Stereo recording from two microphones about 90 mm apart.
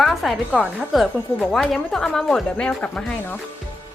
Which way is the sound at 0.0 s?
Centre (ahead or behind).